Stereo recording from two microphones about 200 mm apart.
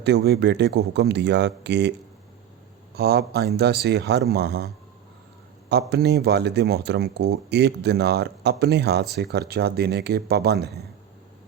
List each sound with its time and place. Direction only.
0.0 s speech: 55° right (ahead or behind)
2.9 s speech: 55° right (ahead or behind)
5.9 s speech: 55° right (ahead or behind)